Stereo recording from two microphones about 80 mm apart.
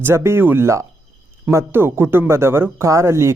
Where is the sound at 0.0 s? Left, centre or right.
Right.